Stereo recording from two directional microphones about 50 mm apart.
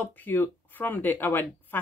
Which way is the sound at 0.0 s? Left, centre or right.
Left.